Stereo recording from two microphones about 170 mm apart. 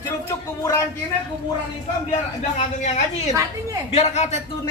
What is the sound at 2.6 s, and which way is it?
A woman's voice, 45° left (ahead or behind).